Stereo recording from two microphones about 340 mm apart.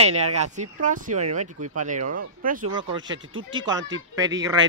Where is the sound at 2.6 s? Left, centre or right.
Right.